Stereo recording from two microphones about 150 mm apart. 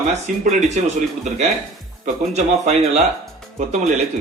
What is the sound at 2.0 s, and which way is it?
Speech, 50° right (ahead or behind).